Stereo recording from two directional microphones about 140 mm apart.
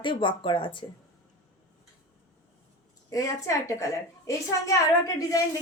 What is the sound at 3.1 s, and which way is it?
A woman's voice, 25° left (ahead or behind).